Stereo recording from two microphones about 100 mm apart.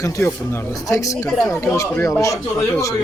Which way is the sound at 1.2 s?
15° left (ahead or behind).